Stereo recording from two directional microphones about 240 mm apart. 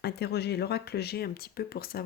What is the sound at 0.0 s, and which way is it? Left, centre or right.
Speech, left.